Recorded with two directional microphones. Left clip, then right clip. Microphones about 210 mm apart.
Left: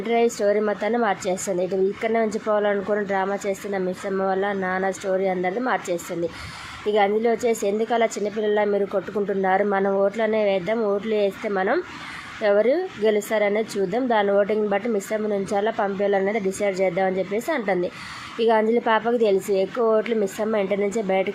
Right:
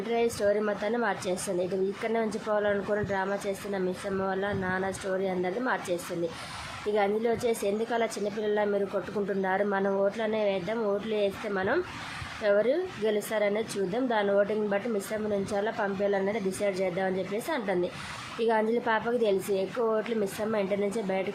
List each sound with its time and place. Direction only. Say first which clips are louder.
0.3 s a woman's voice: left 6 dB; 20° left (ahead or behind)
6.9 s a woman's voice: left 7 dB; 20° left (ahead or behind)